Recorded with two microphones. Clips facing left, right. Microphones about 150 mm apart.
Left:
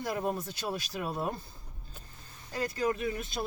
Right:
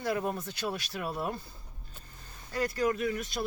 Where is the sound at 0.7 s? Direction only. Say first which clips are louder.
Left 3 dB; 25° left (ahead or behind).